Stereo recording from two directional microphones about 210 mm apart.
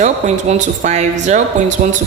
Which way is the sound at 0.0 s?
35° right (ahead or behind).